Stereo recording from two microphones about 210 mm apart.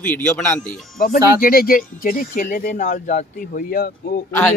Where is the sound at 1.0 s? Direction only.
45° left (ahead or behind).